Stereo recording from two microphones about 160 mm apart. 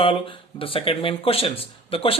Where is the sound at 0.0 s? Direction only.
35° left (ahead or behind).